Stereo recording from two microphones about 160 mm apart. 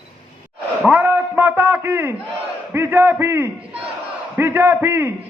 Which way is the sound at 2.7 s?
15° right (ahead or behind).